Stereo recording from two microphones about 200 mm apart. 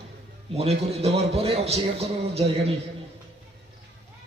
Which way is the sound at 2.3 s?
30° right (ahead or behind).